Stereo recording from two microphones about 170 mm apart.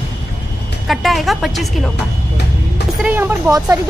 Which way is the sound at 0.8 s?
Centre (ahead or behind).